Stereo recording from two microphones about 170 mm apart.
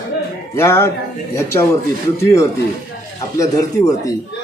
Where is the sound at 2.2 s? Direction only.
15° left (ahead or behind).